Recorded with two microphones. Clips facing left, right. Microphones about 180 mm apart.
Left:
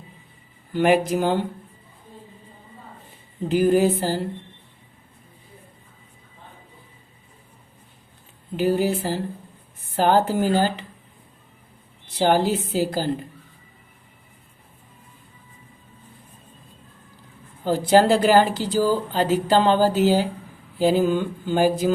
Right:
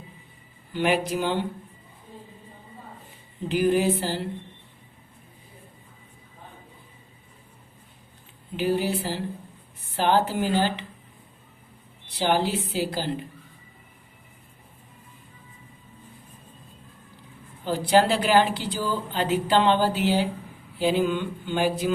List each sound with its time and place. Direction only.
0.7 s a woman's voice: 45° left (ahead or behind)
3.5 s a woman's voice: 45° left (ahead or behind)
8.5 s a woman's voice: 45° left (ahead or behind)
12.0 s a woman's voice: 45° left (ahead or behind)
17.6 s speech: 45° left (ahead or behind)